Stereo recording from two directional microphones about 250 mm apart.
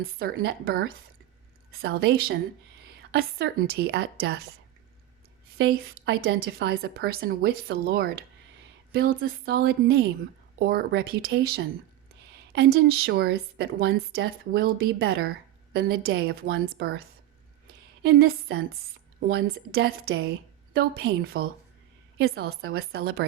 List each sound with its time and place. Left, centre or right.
0.0 s a woman's voice: right
5.5 s a woman's voice: right
18.0 s a woman's voice: right